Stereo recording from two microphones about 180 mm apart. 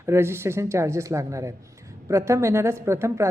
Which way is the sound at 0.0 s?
15° right (ahead or behind).